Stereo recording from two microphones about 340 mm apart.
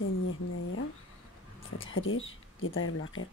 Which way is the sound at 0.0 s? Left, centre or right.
Left.